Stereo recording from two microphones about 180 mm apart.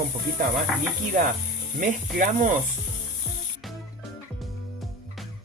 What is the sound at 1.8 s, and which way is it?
Sizzle, 50° right (ahead or behind).